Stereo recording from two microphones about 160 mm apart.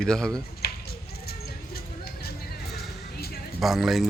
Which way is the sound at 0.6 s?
75° left (ahead or behind).